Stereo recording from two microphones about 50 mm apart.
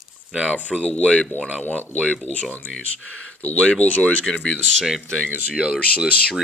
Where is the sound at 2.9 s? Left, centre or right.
Left.